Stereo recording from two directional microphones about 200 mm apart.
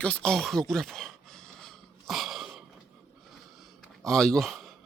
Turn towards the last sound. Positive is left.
turn(degrees=0)  # may be behind; listen again after turning